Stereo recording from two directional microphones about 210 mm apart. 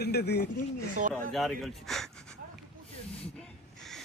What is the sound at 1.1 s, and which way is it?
Speech, centre (ahead or behind).